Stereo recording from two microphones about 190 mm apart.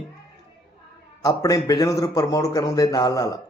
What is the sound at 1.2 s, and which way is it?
A man's voice, 20° left (ahead or behind).